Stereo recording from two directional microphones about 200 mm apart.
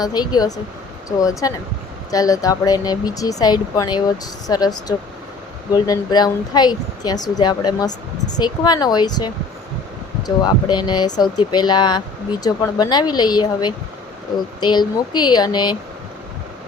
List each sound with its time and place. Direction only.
0.0 s speech: 20° left (ahead or behind)